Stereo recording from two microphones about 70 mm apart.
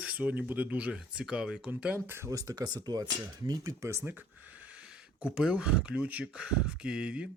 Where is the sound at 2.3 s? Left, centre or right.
Right.